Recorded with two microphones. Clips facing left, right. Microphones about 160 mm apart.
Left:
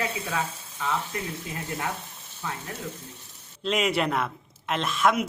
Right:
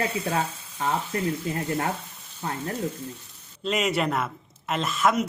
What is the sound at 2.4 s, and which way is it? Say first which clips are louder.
Speech: right 4 dB; 40° right (ahead or behind).